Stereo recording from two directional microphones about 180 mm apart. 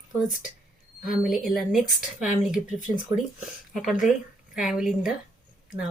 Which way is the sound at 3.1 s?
20° right (ahead or behind).